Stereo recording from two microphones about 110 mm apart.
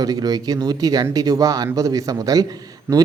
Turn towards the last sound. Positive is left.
turn(degrees=-20)  # may be behind; listen again after turning